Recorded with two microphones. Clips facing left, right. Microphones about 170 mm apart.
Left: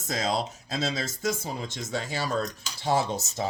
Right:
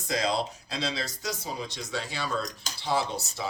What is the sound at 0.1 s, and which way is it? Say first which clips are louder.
Speech: even; 45° left (ahead or behind).